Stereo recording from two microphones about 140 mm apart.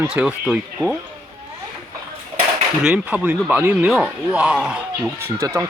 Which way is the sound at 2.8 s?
10° right (ahead or behind).